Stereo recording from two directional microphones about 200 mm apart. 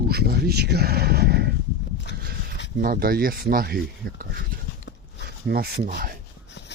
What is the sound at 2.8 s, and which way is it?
Speech, 45° right (ahead or behind).